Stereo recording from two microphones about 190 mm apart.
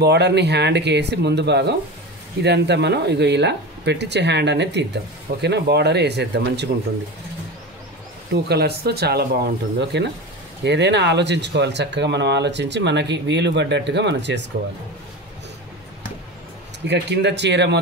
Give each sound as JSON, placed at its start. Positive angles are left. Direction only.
{"t": 0.0, "sound": "speech", "side_deg": -60}
{"t": 8.3, "sound": "speech", "side_deg": -60}
{"t": 16.8, "sound": "speech", "side_deg": -65}